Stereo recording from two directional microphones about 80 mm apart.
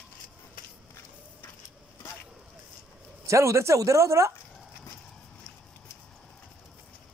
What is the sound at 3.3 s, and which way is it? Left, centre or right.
Speech, right.